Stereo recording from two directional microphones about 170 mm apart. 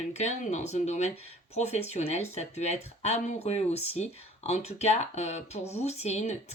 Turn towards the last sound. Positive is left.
turn(degrees=40)  # may be behind; listen again after turning